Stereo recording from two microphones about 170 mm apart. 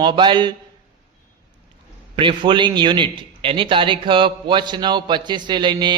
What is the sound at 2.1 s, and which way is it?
A man's voice, 30° right (ahead or behind).